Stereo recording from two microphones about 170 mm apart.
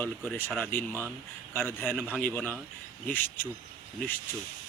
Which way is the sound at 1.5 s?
10° left (ahead or behind).